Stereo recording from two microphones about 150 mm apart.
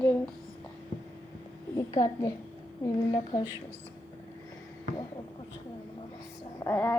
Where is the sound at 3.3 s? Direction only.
20° left (ahead or behind).